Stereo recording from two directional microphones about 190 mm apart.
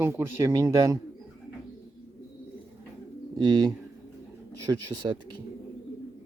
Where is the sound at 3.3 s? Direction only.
20° right (ahead or behind).